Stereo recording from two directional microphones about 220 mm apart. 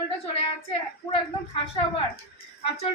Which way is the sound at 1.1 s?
25° left (ahead or behind).